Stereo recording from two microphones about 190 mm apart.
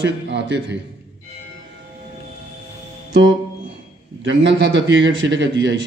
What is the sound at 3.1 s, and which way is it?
Music, 75° right (ahead or behind).